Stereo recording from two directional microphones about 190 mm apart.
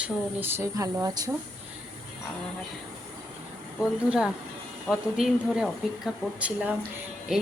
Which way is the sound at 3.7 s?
5° right (ahead or behind).